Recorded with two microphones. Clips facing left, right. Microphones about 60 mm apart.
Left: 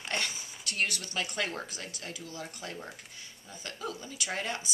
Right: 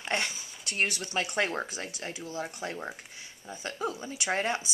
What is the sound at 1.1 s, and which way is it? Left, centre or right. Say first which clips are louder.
Speech: right 6 dB; right.